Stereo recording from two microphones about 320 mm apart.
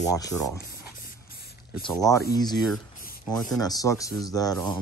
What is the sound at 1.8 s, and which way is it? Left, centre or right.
Speech, centre.